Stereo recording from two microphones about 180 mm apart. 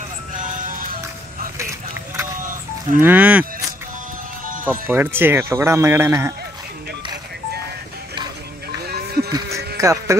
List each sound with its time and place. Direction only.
0.4 s music: 50° right (ahead or behind)
2.3 s music: 50° right (ahead or behind)
3.0 s speech: 10° right (ahead or behind)
4.6 s speech: 10° right (ahead or behind)
8.8 s music: 60° right (ahead or behind)
9.8 s speech: 15° right (ahead or behind)